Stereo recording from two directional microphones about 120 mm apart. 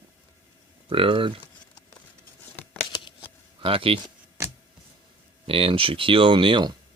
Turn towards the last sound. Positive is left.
turn(degrees=-45)  # may be behind; listen again after turning